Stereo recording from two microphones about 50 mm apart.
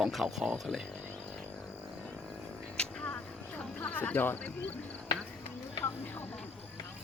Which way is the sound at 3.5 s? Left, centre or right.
Left.